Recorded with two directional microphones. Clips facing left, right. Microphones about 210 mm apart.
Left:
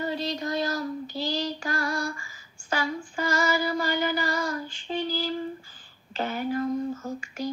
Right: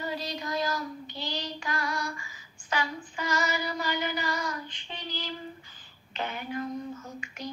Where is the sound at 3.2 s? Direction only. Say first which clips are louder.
Left 4 dB; 50° left (ahead or behind).